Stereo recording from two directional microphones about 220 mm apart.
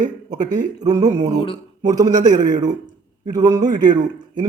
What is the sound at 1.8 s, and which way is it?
Speech, 15° right (ahead or behind).